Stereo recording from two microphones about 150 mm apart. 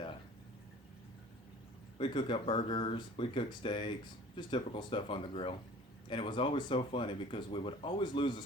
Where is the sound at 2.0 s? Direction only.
35° left (ahead or behind).